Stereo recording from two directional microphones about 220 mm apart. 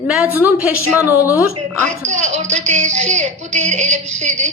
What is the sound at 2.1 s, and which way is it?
Speech, 30° right (ahead or behind).